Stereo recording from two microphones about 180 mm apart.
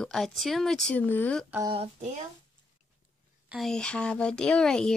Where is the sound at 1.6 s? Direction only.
30° right (ahead or behind).